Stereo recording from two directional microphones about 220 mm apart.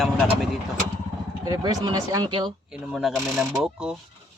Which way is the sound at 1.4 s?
15° right (ahead or behind).